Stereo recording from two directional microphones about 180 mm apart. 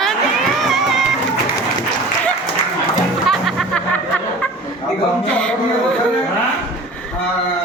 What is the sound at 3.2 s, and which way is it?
Music, centre (ahead or behind).